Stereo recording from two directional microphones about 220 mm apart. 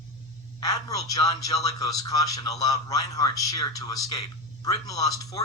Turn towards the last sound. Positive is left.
turn(degrees=15)  # may be behind; listen again after turning